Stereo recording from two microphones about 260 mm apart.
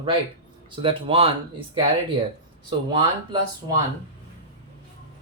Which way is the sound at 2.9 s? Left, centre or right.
Centre.